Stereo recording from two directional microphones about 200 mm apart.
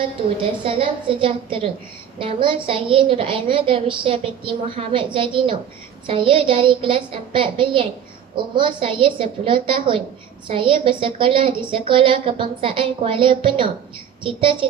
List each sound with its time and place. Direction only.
0.3 s a woman's voice: 25° right (ahead or behind)